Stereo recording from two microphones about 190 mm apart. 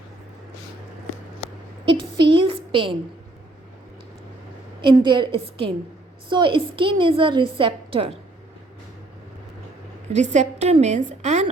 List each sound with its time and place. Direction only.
2.1 s a sound: 25° right (ahead or behind)
4.8 s a woman's voice: 25° right (ahead or behind)
10.1 s a woman's voice: 40° right (ahead or behind)